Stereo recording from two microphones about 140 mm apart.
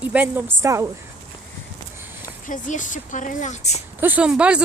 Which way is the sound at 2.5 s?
65° left (ahead or behind).